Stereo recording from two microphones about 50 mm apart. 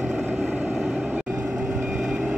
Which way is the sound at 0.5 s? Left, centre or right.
Right.